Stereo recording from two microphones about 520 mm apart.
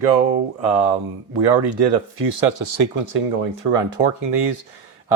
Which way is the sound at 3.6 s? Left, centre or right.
Right.